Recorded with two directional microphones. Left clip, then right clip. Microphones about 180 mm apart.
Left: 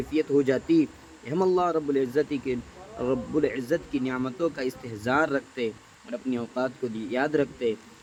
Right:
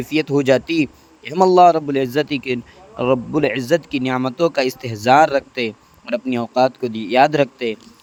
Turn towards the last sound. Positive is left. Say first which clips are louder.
# right 7 dB
turn(degrees=-40)  # may be behind; listen again after turning